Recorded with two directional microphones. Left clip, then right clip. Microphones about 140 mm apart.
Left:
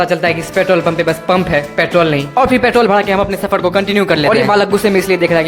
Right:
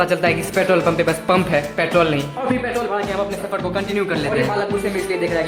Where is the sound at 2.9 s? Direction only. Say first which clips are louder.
Left 9 dB; 50° left (ahead or behind).